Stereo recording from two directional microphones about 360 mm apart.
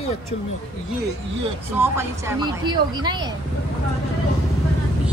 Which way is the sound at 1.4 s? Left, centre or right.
Centre.